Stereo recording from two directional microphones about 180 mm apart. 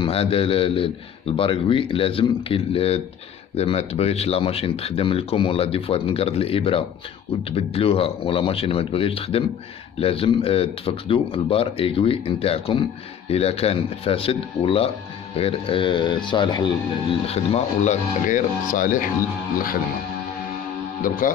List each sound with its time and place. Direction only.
0.0 s speech: 30° left (ahead or behind)
17.3 s speech: 35° left (ahead or behind)
21.0 s speech: 50° left (ahead or behind)